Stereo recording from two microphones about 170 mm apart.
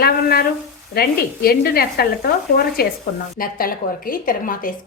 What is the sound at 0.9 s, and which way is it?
Speech, 65° left (ahead or behind).